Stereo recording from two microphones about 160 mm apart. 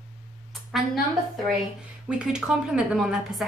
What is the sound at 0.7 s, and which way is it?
Speech, centre (ahead or behind).